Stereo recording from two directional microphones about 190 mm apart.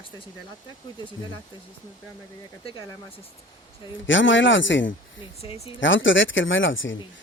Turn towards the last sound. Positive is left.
turn(degrees=85)